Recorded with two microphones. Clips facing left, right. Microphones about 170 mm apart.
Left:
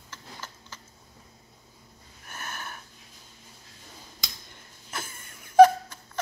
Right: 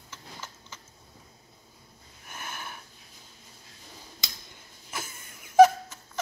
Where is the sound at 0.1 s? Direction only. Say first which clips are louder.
Left 1 dB; 10° right (ahead or behind).